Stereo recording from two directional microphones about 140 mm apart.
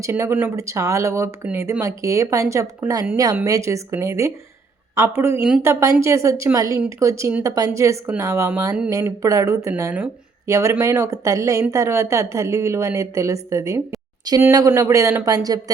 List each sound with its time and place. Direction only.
0.0 s a woman's voice: 20° right (ahead or behind)